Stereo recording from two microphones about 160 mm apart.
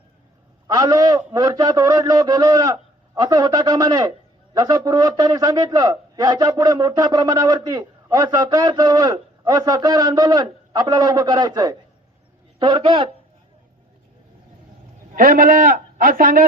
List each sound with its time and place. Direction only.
0.7 s a man's voice: 25° right (ahead or behind)
15.1 s a man's voice: 60° right (ahead or behind)